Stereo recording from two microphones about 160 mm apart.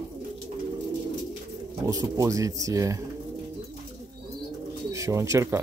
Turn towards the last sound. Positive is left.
turn(degrees=-20)  # may be behind; listen again after turning